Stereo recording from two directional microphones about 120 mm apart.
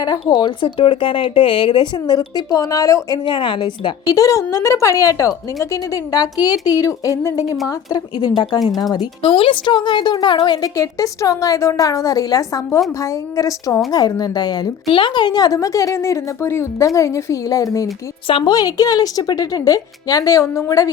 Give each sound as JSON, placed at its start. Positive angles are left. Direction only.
{"t": 0.0, "sound": "speech", "side_deg": 30}
{"t": 0.6, "sound": "speech", "side_deg": 45}
{"t": 3.2, "sound": "a woman's voice", "side_deg": 40}
{"t": 18.3, "sound": "speech", "side_deg": 50}
{"t": 18.5, "sound": "speech", "side_deg": 35}